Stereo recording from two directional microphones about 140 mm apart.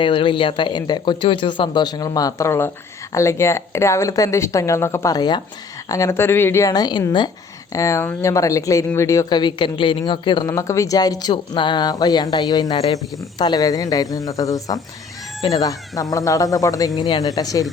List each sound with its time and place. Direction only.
0.0 s speech: 40° left (ahead or behind)
10.5 s speech: 20° left (ahead or behind)